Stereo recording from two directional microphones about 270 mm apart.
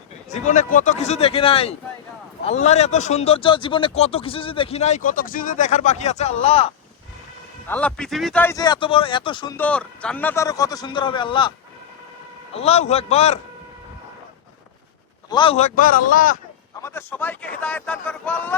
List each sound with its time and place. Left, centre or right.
0.3 s speech: left
7.7 s a man's voice: centre
12.5 s speech: left
15.3 s speech: centre
16.8 s speech: centre